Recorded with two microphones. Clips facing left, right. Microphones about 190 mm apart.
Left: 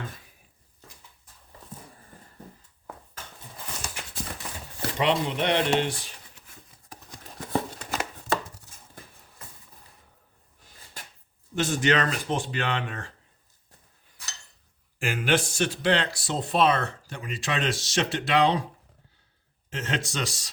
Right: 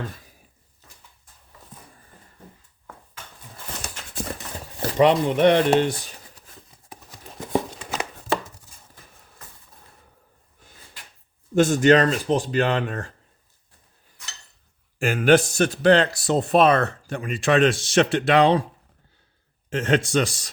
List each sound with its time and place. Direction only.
4.0 s clip-clop: 10° left (ahead or behind)
4.8 s speech: 45° right (ahead or behind)
7.7 s a sound: 5° left (ahead or behind)
11.5 s speech: 45° right (ahead or behind)
14.9 s speech: 45° right (ahead or behind)
19.7 s speech: 55° right (ahead or behind)